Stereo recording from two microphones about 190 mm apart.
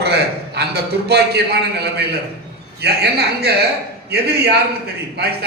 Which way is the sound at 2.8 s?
55° right (ahead or behind).